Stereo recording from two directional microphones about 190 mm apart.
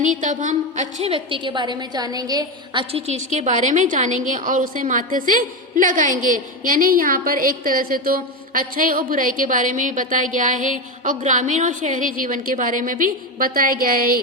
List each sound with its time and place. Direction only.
0.0 s a woman's voice: 40° right (ahead or behind); by 2.8 s 20° right (ahead or behind)
2.9 s a woman's voice: 35° right (ahead or behind)